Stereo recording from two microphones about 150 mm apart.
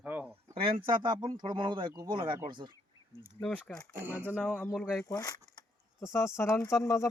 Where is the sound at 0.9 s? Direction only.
30° right (ahead or behind).